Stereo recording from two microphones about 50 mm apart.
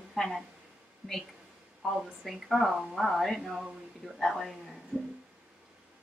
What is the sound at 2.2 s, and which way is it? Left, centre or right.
Speech, centre.